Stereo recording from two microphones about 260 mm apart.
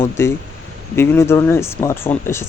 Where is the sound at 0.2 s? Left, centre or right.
Centre.